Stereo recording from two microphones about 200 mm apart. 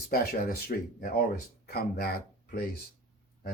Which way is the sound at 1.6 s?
50° left (ahead or behind).